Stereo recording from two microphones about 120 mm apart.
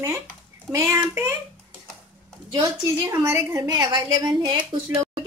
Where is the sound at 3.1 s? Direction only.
30° right (ahead or behind).